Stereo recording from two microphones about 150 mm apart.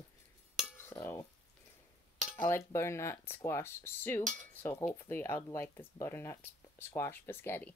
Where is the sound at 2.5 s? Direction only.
20° left (ahead or behind).